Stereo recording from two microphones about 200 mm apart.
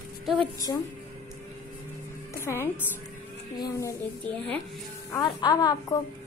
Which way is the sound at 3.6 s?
15° left (ahead or behind).